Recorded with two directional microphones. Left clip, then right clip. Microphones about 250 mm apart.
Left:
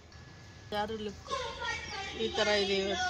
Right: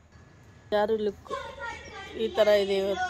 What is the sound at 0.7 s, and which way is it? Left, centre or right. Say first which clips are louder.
Speech: right 10 dB; right.